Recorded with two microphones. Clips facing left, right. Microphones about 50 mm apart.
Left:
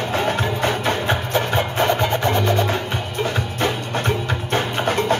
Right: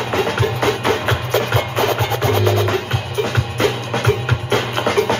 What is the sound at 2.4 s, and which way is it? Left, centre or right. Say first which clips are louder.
Music: right 2 dB; right.